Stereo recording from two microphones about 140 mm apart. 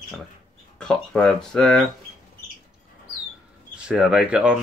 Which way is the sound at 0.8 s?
5° left (ahead or behind).